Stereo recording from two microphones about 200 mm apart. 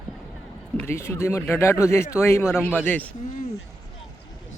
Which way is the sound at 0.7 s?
10° left (ahead or behind).